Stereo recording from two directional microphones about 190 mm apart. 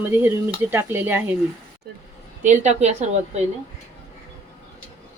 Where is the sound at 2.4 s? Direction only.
40° right (ahead or behind).